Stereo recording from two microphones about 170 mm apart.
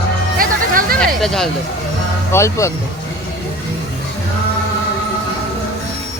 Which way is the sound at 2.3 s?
15° left (ahead or behind).